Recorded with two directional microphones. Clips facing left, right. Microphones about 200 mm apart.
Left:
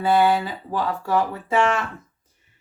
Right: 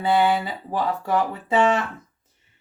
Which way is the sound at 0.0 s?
20° right (ahead or behind).